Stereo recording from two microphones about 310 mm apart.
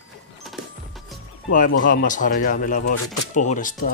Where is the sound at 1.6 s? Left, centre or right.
Left.